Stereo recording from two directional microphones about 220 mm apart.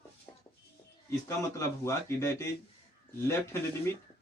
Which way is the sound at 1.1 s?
15° left (ahead or behind).